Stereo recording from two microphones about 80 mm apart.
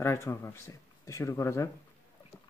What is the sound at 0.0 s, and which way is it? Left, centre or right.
Speech, left.